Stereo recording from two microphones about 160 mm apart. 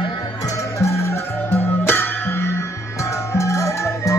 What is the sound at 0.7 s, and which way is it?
Music, 15° left (ahead or behind).